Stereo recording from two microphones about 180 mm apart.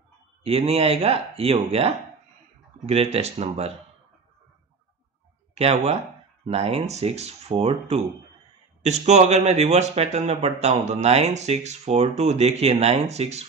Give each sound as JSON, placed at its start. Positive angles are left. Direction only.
{"t": 0.4, "sound": "speech", "side_deg": -35}
{"t": 5.5, "sound": "speech", "side_deg": -35}